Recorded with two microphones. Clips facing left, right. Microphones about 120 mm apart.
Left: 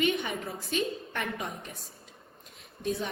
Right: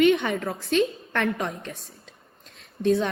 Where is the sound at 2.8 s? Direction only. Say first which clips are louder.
Right 10 dB; 65° right (ahead or behind).